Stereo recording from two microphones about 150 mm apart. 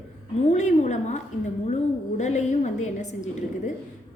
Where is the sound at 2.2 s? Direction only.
50° left (ahead or behind).